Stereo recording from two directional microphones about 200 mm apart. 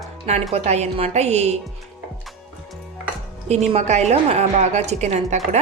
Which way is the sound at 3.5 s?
35° right (ahead or behind).